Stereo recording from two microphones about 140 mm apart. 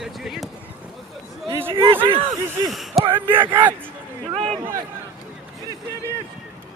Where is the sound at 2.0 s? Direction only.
40° right (ahead or behind).